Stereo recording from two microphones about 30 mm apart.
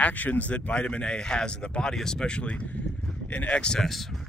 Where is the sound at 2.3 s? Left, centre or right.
Left.